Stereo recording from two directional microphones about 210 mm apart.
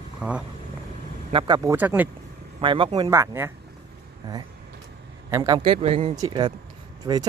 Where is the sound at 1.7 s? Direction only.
10° right (ahead or behind).